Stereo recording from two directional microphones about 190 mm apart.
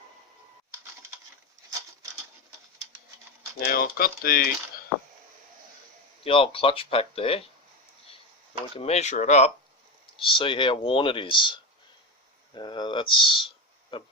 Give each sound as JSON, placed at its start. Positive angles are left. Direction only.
{"t": 3.6, "sound": "speech", "side_deg": 50}
{"t": 6.2, "sound": "speech", "side_deg": 30}
{"t": 8.7, "sound": "speech", "side_deg": 35}
{"t": 10.2, "sound": "speech", "side_deg": 25}